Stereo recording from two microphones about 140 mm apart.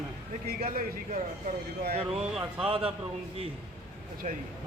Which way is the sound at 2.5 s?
40° right (ahead or behind).